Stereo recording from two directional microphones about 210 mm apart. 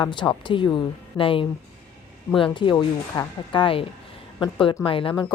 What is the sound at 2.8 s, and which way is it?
A woman's voice, 25° left (ahead or behind).